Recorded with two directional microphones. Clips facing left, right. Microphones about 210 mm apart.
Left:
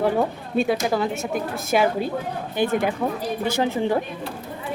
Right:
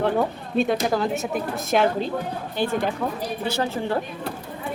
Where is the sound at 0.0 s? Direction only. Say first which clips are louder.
Left 1 dB; 5° left (ahead or behind).